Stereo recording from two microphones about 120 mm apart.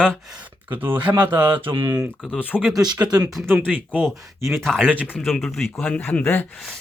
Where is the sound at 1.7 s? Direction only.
30° right (ahead or behind).